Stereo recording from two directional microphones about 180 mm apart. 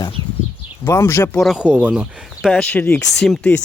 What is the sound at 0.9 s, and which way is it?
Speech, 15° left (ahead or behind).